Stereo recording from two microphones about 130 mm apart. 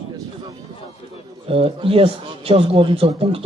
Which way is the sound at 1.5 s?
45° right (ahead or behind).